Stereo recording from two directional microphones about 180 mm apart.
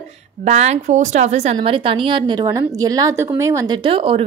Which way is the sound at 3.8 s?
30° right (ahead or behind).